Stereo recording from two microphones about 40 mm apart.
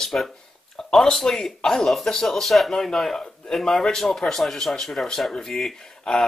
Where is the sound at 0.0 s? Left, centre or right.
Centre.